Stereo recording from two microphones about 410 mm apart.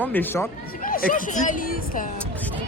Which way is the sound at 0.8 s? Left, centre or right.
Left.